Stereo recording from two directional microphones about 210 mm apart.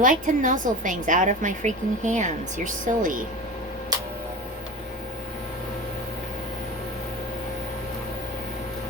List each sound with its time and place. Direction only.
0.0 s a woman's voice: 40° right (ahead or behind)